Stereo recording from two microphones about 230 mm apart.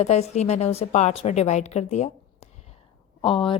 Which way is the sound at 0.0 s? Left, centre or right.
Left.